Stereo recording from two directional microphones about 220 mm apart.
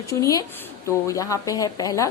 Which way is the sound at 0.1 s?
15° left (ahead or behind).